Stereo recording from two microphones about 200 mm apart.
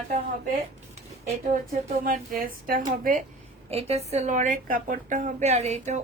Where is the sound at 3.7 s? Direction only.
30° right (ahead or behind).